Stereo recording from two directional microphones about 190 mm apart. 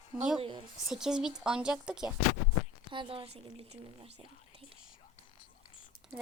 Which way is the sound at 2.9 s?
30° right (ahead or behind).